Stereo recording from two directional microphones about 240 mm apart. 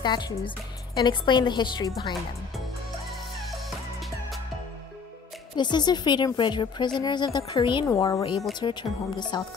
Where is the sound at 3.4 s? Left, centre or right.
Centre.